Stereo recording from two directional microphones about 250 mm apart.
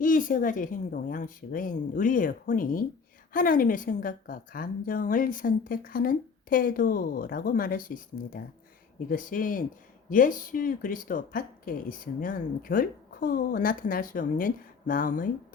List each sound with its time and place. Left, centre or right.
0.0 s speech: left